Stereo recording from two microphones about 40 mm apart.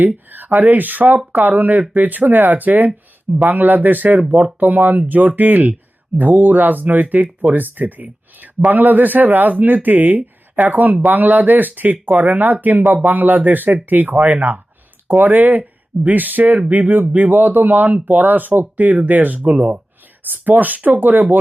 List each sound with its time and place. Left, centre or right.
0.0 s speech: right
15.0 s speech: right